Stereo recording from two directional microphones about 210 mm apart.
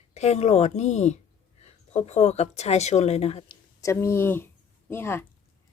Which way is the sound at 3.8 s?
15° left (ahead or behind).